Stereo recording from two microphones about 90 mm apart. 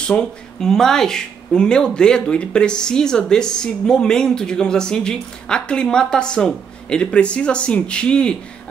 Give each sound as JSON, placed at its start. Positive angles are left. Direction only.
{"t": 0.0, "sound": "speech", "side_deg": 10}